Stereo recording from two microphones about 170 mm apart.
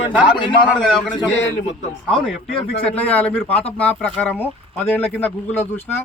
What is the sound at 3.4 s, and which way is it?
Speech, 35° left (ahead or behind).